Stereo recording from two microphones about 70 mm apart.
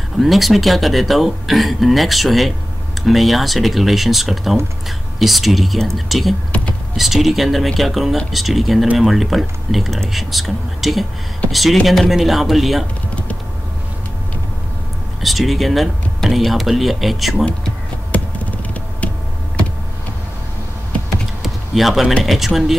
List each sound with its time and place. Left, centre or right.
0.2 s speech: centre
15.2 s speech: centre
17.5 s a sound: centre
21.4 s typing: centre
22.2 s speech: centre